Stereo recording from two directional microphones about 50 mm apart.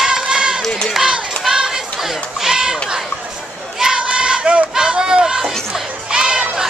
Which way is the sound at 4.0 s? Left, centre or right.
Right.